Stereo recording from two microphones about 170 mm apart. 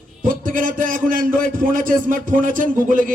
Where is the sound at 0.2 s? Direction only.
55° right (ahead or behind).